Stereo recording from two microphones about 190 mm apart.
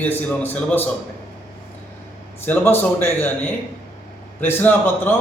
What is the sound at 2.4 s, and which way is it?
A man's voice, 10° left (ahead or behind).